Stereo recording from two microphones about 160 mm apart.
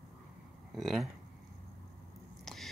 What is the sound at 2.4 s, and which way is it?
Biting, centre (ahead or behind).